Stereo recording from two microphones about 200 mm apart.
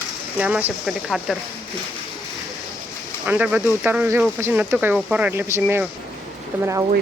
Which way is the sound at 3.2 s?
5° right (ahead or behind).